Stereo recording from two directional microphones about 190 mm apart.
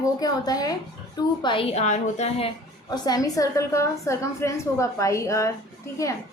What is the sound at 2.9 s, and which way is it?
A woman's voice, 20° left (ahead or behind).